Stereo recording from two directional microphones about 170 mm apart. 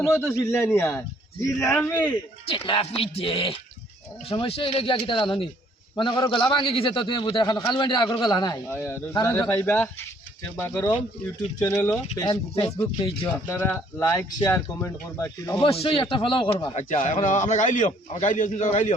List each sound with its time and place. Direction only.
0.2 s speech: 15° left (ahead or behind)
2.5 s a man's voice: 35° left (ahead or behind)
13.2 s speech: 15° left (ahead or behind)
15.6 s a man's voice: 30° left (ahead or behind)
16.7 s a man's voice: 40° left (ahead or behind)